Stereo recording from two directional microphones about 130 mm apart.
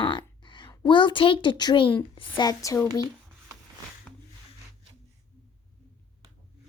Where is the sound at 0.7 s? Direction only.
35° left (ahead or behind).